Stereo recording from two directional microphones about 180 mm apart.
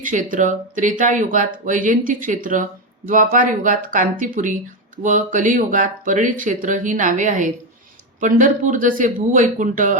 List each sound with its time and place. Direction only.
0.0 s speech: 45° right (ahead or behind)